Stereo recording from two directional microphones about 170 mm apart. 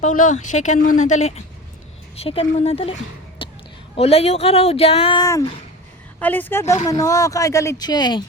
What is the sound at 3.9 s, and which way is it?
Speech, 35° left (ahead or behind).